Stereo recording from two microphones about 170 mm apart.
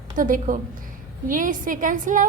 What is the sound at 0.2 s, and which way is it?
A woman's voice, 50° right (ahead or behind).